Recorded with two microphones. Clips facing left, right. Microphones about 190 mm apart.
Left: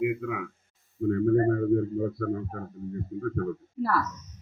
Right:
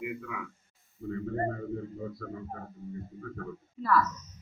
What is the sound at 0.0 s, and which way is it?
Speech, 60° left (ahead or behind).